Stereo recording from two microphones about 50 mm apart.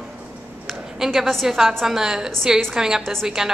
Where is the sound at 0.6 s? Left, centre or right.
Centre.